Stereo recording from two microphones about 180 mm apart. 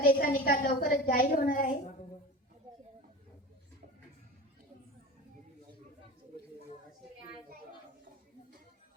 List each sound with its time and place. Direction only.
0.0 s a woman's voice: 55° left (ahead or behind)